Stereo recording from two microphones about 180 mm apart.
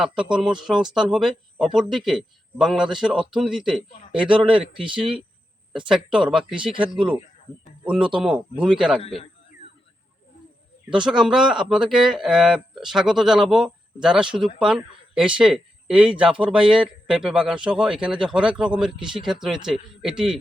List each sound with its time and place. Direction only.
0.0 s speech: 5° right (ahead or behind)
5.9 s speech: 5° right (ahead or behind)
9.0 s a man's voice: 30° left (ahead or behind)
10.9 s speech: 5° right (ahead or behind)
18.9 s speech: 25° right (ahead or behind)
19.3 s speech: 5° right (ahead or behind)